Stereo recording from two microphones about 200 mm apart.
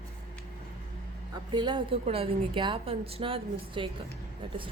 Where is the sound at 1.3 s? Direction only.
25° right (ahead or behind).